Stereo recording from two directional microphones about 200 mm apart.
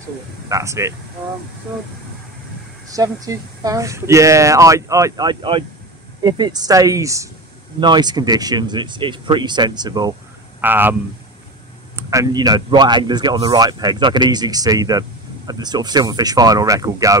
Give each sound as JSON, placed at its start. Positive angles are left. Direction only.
{"t": 0.5, "sound": "speech", "side_deg": -15}
{"t": 2.9, "sound": "speech", "side_deg": -15}
{"t": 10.6, "sound": "speech", "side_deg": -10}